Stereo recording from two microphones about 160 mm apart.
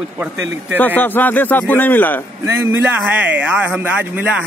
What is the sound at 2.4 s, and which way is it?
Speech, 15° right (ahead or behind).